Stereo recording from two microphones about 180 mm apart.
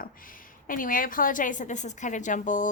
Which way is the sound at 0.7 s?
50° left (ahead or behind).